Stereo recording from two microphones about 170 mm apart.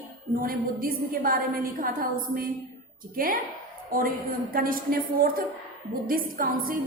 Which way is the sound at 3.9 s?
55° right (ahead or behind).